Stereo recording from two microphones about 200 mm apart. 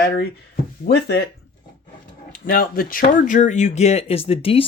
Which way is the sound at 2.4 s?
45° left (ahead or behind).